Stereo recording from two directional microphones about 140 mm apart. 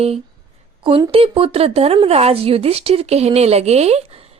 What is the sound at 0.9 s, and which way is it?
Speech, 40° right (ahead or behind).